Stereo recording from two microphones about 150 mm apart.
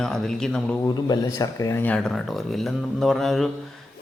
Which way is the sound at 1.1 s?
25° left (ahead or behind).